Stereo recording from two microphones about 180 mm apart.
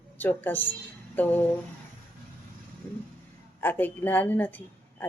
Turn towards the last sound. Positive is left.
turn(degrees=10)  # may be behind; listen again after turning